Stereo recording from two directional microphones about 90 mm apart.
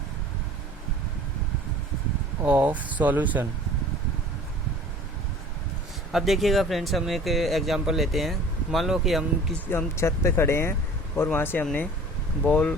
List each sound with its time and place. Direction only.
2.4 s speech: 15° right (ahead or behind)
6.1 s speech: centre (ahead or behind)
9.6 s speech: 30° left (ahead or behind)